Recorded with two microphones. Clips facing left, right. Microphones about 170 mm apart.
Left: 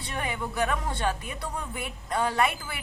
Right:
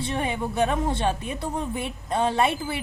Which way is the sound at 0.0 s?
25° right (ahead or behind).